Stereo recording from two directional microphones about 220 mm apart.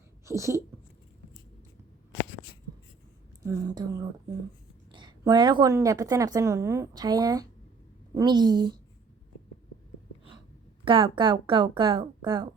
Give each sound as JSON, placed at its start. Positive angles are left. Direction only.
{"t": 0.3, "sound": "a woman's voice", "side_deg": -15}
{"t": 3.4, "sound": "a woman's voice", "side_deg": -15}
{"t": 10.8, "sound": "speech", "side_deg": -20}